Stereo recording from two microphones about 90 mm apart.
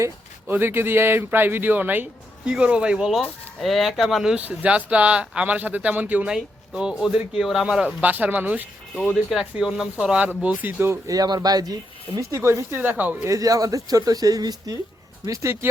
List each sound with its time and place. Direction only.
0.5 s a man's voice: 25° right (ahead or behind); by 7.9 s 5° right (ahead or behind)
8.0 s a man's voice: 20° right (ahead or behind)
9.3 s speech: 5° right (ahead or behind); by 10.9 s 20° right (ahead or behind)
11.0 s speech: 40° right (ahead or behind); by 13.1 s 20° right (ahead or behind)
13.2 s speech: 40° right (ahead or behind)